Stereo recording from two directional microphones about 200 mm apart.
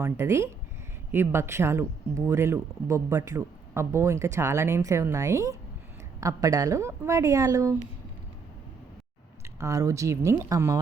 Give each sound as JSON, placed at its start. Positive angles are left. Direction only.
{"t": 0.0, "sound": "speech", "side_deg": -15}
{"t": 9.6, "sound": "speech", "side_deg": -15}